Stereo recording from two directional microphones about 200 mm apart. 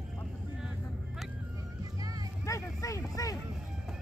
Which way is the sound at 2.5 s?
15° left (ahead or behind).